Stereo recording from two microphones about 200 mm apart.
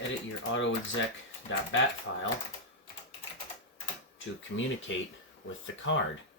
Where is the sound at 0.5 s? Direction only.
70° left (ahead or behind).